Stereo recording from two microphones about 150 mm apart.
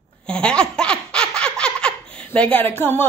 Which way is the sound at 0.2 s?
5° left (ahead or behind).